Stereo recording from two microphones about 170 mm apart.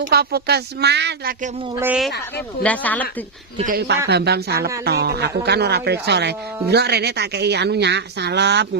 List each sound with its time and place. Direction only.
0.1 s speech: 65° right (ahead or behind)
2.6 s speech: 10° left (ahead or behind)
3.7 s speech: 75° right (ahead or behind)